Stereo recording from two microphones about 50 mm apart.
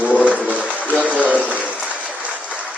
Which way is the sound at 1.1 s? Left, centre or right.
Right.